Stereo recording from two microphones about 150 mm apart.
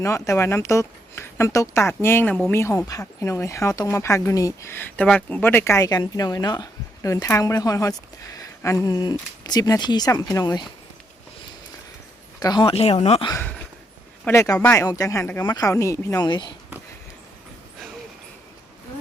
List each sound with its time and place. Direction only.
0.0 s speech: 20° left (ahead or behind)
12.4 s speech: 30° left (ahead or behind)
12.7 s speech: 40° left (ahead or behind)
14.3 s speech: 20° left (ahead or behind)